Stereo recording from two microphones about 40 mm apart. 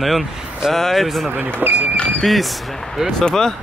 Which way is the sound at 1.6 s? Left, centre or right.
Right.